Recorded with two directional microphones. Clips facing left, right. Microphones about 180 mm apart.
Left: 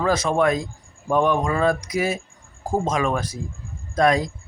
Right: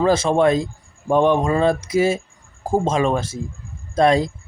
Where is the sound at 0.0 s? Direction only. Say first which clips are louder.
Right 4 dB; 30° right (ahead or behind).